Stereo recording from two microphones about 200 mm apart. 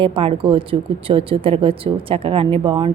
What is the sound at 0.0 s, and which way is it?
Speech, 25° right (ahead or behind).